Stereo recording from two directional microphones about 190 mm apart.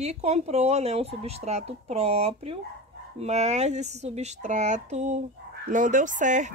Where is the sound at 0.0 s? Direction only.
35° right (ahead or behind).